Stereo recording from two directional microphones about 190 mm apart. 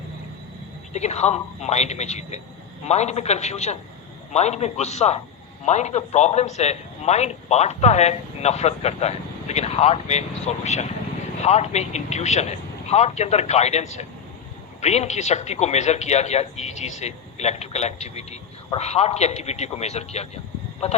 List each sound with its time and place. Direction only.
0.9 s speech: 35° left (ahead or behind)